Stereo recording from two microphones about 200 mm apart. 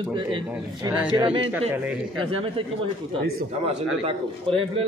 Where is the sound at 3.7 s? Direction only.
30° right (ahead or behind).